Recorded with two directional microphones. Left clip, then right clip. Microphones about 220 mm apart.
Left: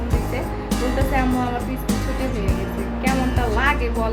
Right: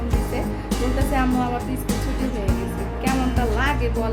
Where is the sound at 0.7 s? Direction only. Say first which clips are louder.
Left 2 dB; centre (ahead or behind).